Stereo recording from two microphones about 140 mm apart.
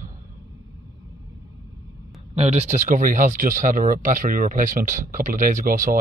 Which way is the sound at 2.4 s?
50° right (ahead or behind).